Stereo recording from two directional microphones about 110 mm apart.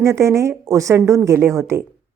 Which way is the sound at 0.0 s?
25° right (ahead or behind).